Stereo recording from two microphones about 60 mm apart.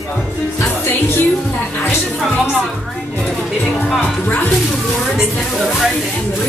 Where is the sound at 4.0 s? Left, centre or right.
Left.